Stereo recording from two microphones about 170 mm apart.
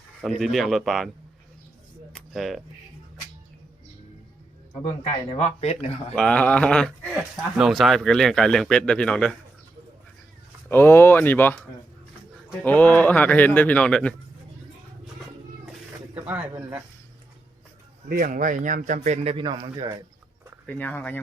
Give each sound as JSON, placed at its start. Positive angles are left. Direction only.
{"t": 0.2, "sound": "speech", "side_deg": 0}
{"t": 2.1, "sound": "a sound", "side_deg": 0}
{"t": 5.4, "sound": "speech", "side_deg": 40}
{"t": 6.1, "sound": "speech", "side_deg": 5}
{"t": 10.7, "sound": "speech", "side_deg": 15}
{"t": 12.6, "sound": "speech", "side_deg": 10}
{"t": 16.2, "sound": "speech", "side_deg": -10}
{"t": 18.1, "sound": "speech", "side_deg": -55}
{"t": 20.7, "sound": "speech", "side_deg": 10}